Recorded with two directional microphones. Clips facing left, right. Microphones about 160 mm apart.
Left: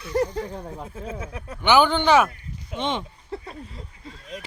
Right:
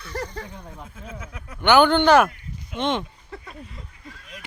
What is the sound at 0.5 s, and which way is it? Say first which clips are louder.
Speech: left 6 dB; 35° left (ahead or behind).